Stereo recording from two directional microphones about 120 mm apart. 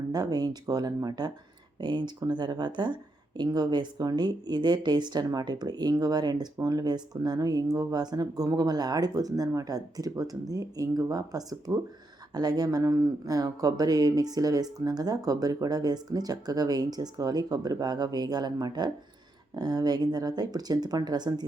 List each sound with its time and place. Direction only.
0.1 s speech: 35° right (ahead or behind)